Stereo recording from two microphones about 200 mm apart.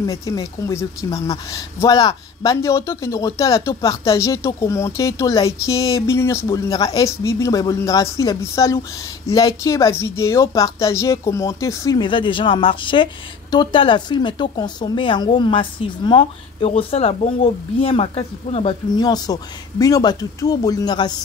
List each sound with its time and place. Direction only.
0.0 s speech: 15° left (ahead or behind)